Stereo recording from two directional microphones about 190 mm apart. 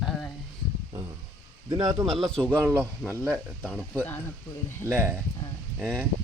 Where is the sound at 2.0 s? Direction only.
Centre (ahead or behind).